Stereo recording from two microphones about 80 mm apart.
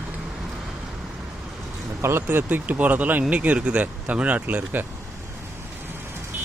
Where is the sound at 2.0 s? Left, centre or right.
Right.